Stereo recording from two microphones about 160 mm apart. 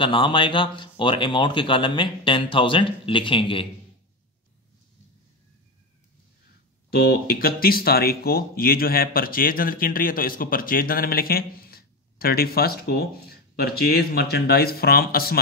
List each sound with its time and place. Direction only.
0.0 s speech: 30° left (ahead or behind)
6.9 s speech: 75° left (ahead or behind)